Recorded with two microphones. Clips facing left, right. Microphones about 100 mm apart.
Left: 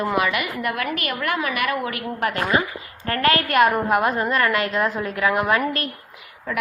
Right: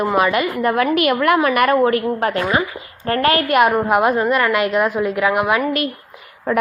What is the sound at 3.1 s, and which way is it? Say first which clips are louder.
A woman's voice: right 4 dB; 25° right (ahead or behind).